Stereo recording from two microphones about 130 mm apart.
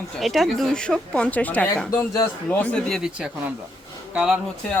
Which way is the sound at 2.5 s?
10° left (ahead or behind).